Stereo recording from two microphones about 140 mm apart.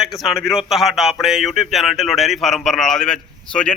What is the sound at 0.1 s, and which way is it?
Speech, centre (ahead or behind).